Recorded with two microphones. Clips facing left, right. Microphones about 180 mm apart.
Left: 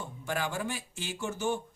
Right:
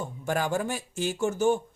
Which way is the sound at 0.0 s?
45° right (ahead or behind).